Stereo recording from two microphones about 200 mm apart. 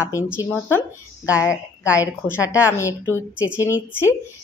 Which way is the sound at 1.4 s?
15° left (ahead or behind).